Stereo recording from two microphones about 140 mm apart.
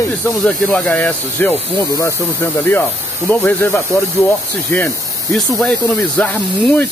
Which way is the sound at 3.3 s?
15° left (ahead or behind).